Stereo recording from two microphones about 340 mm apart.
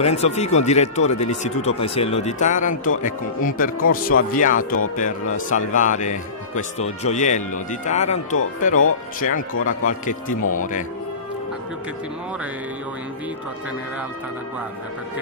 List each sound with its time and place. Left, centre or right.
0.0 s speech: centre